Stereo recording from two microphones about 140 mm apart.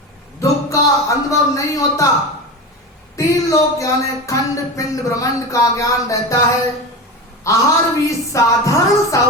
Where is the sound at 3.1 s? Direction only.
25° left (ahead or behind).